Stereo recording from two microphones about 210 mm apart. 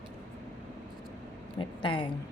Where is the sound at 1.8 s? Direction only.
25° left (ahead or behind).